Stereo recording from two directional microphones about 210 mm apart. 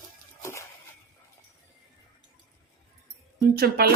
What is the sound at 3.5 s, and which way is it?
Speech, 45° right (ahead or behind).